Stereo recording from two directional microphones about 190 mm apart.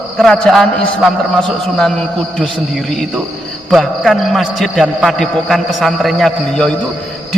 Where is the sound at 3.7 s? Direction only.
Centre (ahead or behind).